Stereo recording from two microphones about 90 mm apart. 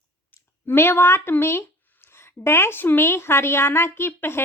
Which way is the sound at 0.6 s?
25° left (ahead or behind).